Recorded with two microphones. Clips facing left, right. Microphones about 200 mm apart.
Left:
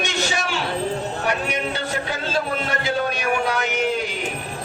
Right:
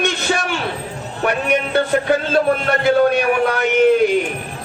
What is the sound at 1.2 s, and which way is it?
Music, 55° right (ahead or behind).